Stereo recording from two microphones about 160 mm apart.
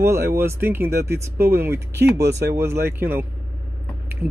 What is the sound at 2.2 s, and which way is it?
Speech, 90° right.